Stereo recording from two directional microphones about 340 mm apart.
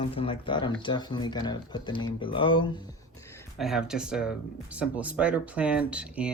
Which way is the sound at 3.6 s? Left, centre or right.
Centre.